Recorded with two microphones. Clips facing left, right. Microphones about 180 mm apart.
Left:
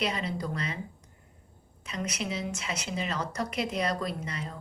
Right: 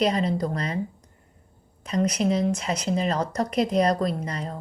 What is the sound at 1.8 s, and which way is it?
A woman's voice, 40° right (ahead or behind).